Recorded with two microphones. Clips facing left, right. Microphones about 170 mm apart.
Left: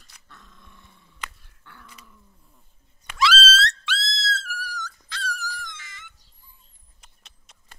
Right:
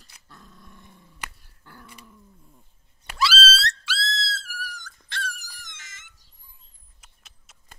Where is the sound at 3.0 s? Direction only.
35° right (ahead or behind).